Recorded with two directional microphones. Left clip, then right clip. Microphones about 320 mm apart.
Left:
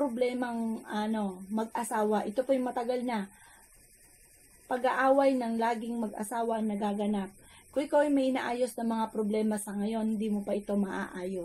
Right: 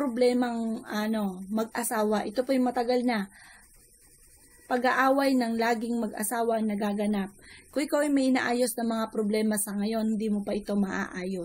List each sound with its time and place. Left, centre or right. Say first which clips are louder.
0.1 s a woman's voice: right 6 dB; right
4.6 s a woman's voice: right 2 dB; right